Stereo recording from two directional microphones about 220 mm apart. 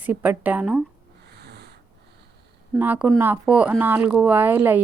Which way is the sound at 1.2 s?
50° right (ahead or behind).